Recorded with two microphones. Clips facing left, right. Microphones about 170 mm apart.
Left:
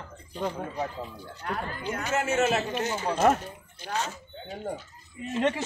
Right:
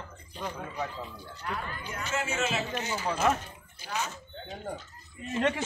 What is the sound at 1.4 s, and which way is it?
Speech, 40° left (ahead or behind).